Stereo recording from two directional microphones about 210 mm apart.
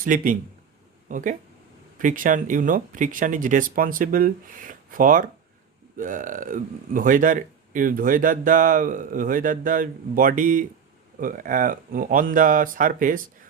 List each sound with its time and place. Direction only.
0.0 s speech: 40° right (ahead or behind)